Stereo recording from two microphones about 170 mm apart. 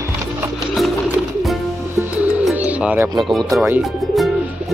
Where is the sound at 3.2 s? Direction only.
Centre (ahead or behind).